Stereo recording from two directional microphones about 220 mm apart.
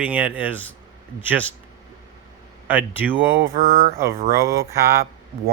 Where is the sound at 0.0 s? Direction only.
5° right (ahead or behind).